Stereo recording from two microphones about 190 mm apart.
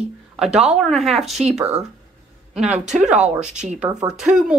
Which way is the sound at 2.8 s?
40° right (ahead or behind).